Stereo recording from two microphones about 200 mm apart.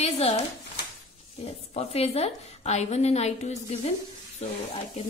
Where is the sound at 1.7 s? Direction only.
30° left (ahead or behind).